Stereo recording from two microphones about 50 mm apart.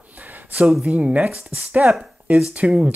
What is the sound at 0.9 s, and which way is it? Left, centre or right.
Speech, right.